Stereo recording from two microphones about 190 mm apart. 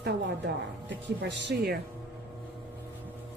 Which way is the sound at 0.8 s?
65° right (ahead or behind).